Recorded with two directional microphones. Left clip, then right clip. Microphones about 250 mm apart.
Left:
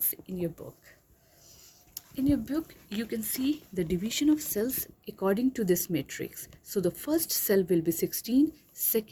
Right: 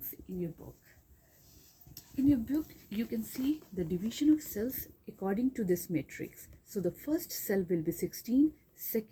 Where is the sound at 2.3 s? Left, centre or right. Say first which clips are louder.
Left 2 dB; left.